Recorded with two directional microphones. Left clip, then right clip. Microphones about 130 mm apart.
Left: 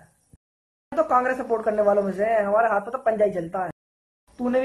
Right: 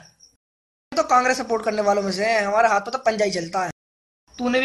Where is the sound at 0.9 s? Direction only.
25° right (ahead or behind).